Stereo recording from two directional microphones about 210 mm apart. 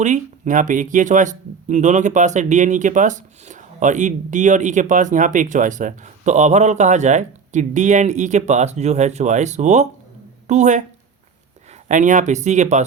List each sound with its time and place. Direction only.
0.0 s speech: 35° right (ahead or behind)
11.9 s speech: 35° right (ahead or behind)